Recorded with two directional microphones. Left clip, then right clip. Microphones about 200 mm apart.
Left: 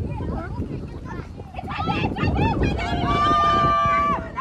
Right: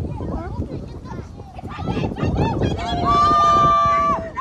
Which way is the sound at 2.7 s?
20° right (ahead or behind).